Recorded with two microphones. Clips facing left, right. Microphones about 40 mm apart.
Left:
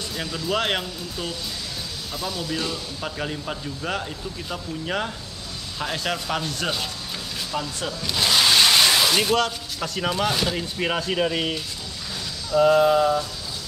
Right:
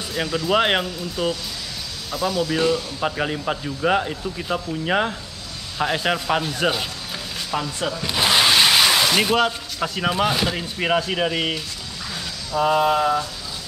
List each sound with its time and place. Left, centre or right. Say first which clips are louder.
0.1 s speech: right 6 dB; right
12.5 s speech: left 2 dB; centre